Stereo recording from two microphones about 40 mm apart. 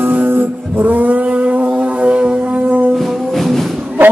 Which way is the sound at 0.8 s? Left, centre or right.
Right.